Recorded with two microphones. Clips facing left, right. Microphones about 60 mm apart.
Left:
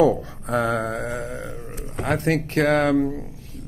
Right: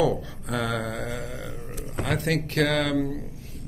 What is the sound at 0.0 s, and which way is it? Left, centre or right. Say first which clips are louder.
Speech: left 6 dB; left.